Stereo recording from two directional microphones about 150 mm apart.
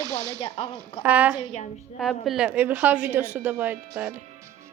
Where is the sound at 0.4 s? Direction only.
40° left (ahead or behind).